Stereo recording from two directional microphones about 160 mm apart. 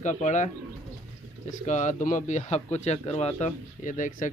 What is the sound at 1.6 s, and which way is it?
A man's voice, 50° left (ahead or behind).